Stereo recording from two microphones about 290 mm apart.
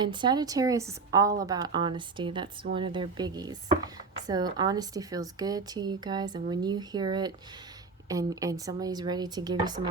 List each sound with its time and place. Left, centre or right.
0.0 s a woman's voice: centre